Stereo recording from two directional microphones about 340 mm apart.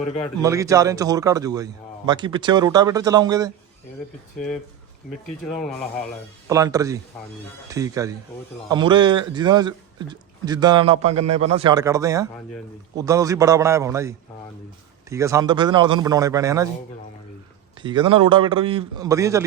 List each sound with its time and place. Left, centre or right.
0.4 s a man's voice: centre
5.2 s speech: centre
6.5 s a man's voice: centre
17.8 s a man's voice: centre